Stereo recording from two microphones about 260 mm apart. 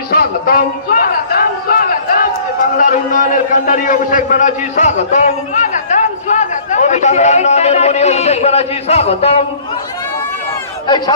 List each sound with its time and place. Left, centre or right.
0.1 s a sound: left
2.7 s a man's voice: left
10.8 s speech: centre